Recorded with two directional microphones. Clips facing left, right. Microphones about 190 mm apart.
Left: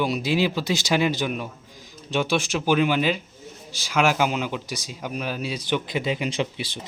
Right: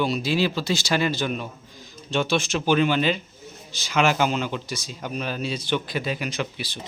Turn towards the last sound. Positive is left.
turn(degrees=25)  # may be behind; listen again after turning